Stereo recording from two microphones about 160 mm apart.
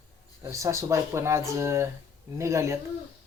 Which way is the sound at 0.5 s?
20° right (ahead or behind).